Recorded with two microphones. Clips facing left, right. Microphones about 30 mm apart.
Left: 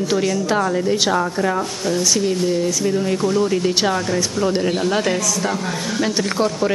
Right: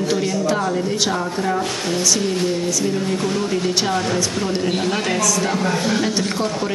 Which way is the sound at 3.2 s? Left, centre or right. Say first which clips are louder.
Left 4 dB; right.